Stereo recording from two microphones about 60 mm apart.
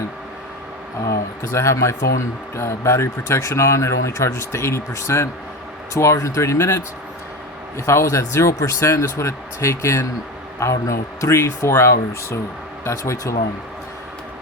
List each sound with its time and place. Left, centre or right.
1.5 s speech: left
7.9 s speech: left